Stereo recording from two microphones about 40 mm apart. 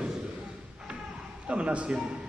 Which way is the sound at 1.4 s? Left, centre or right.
Right.